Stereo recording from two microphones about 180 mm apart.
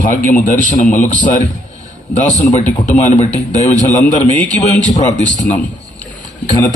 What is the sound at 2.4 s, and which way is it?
A man's voice, 40° left (ahead or behind).